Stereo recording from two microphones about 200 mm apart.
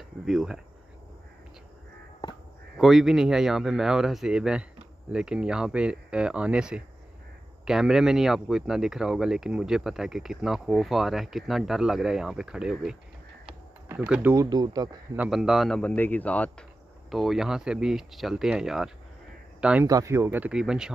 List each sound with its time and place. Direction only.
0.2 s speech: centre (ahead or behind)
2.8 s speech: centre (ahead or behind); by 15.0 s 20° right (ahead or behind)
15.1 s speech: centre (ahead or behind)